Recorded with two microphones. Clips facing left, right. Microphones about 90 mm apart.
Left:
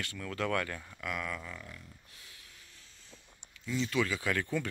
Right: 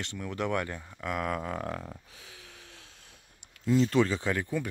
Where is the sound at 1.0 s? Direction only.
40° right (ahead or behind).